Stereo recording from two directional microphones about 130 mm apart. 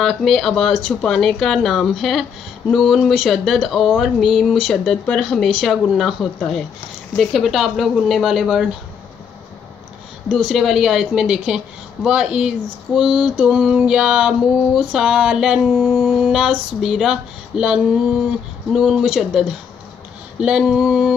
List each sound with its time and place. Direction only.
0.0 s a woman's voice: centre (ahead or behind)
10.3 s a woman's voice: centre (ahead or behind)
20.4 s a woman's voice: 5° right (ahead or behind)